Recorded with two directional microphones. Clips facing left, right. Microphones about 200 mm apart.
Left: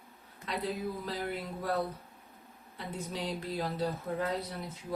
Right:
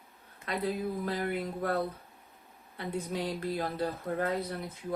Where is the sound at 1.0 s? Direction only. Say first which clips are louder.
Right 4 dB; 55° right (ahead or behind).